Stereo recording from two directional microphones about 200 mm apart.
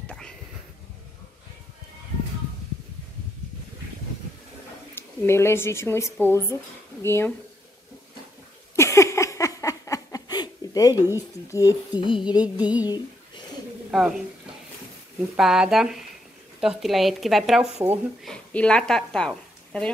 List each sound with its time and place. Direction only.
0.0 s a sound: 5° left (ahead or behind)
4.9 s speech: 10° left (ahead or behind)
8.7 s a sound: 15° left (ahead or behind)
11.0 s music: 10° right (ahead or behind)
11.4 s speech: 15° left (ahead or behind)
12.4 s music: 5° right (ahead or behind)
13.8 s a woman's voice: 5° right (ahead or behind)